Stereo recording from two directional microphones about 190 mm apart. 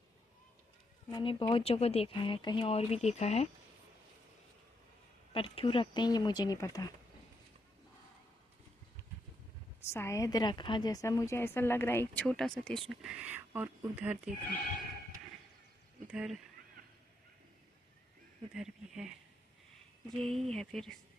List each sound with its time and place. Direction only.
1.1 s speech: 25° left (ahead or behind)
5.3 s speech: 25° left (ahead or behind)
9.8 s a woman's voice: 15° left (ahead or behind); by 14.2 s 10° right (ahead or behind)
16.0 s speech: 5° right (ahead or behind)
18.5 s speech: 5° right (ahead or behind)
20.1 s speech: centre (ahead or behind)